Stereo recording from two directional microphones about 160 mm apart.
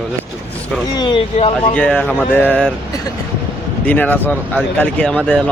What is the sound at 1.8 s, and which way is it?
Speech, 10° left (ahead or behind).